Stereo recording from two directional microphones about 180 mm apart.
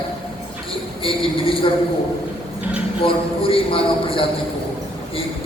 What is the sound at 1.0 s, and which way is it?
Speech, 30° left (ahead or behind).